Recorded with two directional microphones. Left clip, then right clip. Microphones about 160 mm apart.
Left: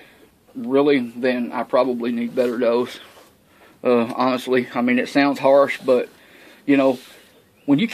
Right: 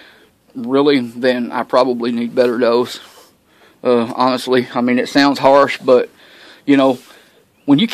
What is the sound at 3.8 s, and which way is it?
A man's voice, 30° right (ahead or behind).